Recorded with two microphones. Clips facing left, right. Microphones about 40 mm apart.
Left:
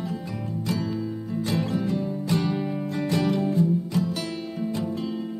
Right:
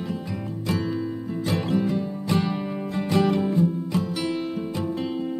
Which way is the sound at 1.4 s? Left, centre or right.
Centre.